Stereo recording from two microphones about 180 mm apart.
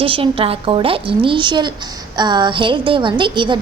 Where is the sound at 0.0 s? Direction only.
30° right (ahead or behind).